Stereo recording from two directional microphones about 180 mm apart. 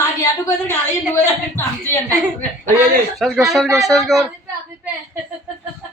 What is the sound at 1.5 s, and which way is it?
Speech, 10° left (ahead or behind).